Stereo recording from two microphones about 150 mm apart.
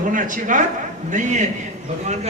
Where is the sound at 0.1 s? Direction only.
60° right (ahead or behind).